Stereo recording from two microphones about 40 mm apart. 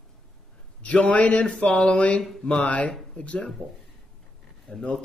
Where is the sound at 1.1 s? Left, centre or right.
Left.